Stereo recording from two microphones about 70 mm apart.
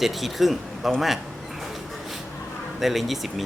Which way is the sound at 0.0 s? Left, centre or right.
Centre.